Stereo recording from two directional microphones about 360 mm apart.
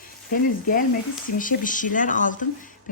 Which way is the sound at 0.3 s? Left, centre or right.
Left.